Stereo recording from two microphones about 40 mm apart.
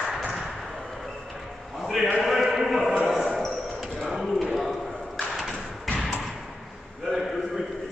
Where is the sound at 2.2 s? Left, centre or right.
Centre.